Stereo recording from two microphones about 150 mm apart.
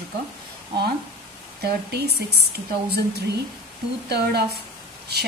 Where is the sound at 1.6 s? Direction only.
90° right.